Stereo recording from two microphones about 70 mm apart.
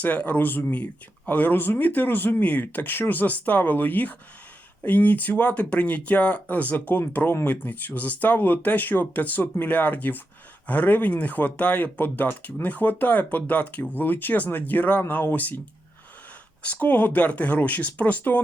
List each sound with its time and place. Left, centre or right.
0.0 s speech: left
16.6 s speech: left